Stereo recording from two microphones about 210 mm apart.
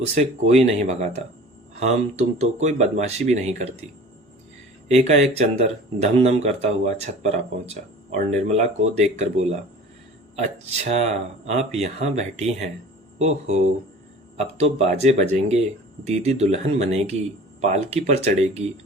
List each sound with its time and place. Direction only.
0.0 s speech: 30° right (ahead or behind)
4.9 s speech: 30° right (ahead or behind)
10.8 s speech: 30° right (ahead or behind)